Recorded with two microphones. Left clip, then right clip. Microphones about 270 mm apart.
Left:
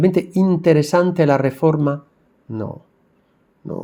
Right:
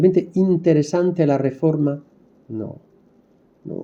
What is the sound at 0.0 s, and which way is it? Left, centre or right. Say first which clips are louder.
Speech: right 1 dB; left.